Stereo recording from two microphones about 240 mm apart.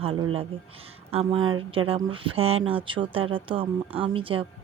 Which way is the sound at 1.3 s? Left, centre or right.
Right.